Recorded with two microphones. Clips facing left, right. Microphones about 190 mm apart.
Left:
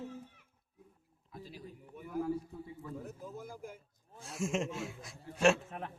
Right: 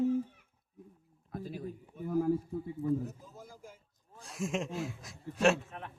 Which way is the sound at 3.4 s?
55° left (ahead or behind).